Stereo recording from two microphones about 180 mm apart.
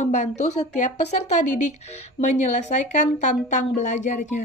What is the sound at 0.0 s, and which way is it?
Speech, 40° left (ahead or behind).